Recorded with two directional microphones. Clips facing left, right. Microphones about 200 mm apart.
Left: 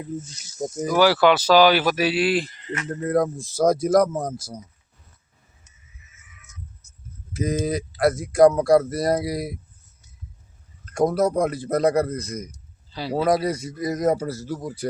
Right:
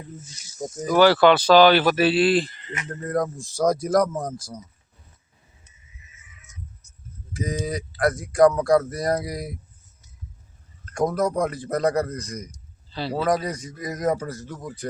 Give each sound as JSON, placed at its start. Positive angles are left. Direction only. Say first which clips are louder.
{"t": 0.8, "sound": "speech", "louder": "right 2 dB", "side_deg": 10}
{"t": 4.1, "sound": "speech", "louder": "left 2 dB", "side_deg": 25}
{"t": 7.3, "sound": "speech", "louder": "left 4 dB", "side_deg": 5}
{"t": 10.9, "sound": "speech", "louder": "left 3 dB", "side_deg": 10}